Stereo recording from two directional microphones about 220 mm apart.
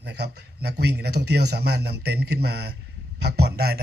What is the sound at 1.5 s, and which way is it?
A man's voice, 45° right (ahead or behind).